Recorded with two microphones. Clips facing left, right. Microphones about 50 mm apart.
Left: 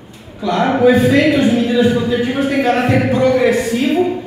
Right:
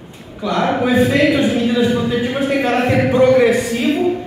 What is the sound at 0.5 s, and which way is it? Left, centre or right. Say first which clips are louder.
Speech: left 3 dB; centre.